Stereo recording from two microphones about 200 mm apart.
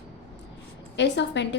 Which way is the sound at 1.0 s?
60° left (ahead or behind).